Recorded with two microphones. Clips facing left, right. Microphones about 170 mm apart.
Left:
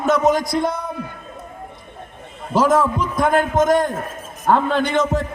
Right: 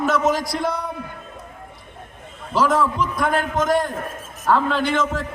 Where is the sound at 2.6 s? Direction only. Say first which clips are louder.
Left 3 dB; 45° left (ahead or behind).